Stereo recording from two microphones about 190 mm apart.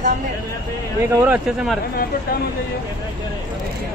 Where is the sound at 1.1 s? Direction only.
10° right (ahead or behind).